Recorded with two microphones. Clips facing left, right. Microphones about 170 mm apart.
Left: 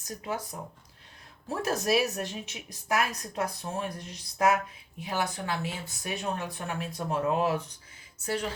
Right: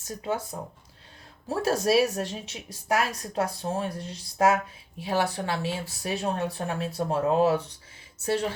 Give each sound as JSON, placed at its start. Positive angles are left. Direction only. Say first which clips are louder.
{"t": 0.0, "sound": "speech", "louder": "right 4 dB", "side_deg": -25}